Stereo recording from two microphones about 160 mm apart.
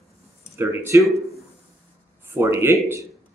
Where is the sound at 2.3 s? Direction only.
15° right (ahead or behind).